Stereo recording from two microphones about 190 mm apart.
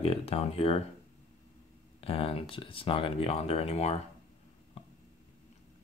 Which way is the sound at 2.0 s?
30° left (ahead or behind).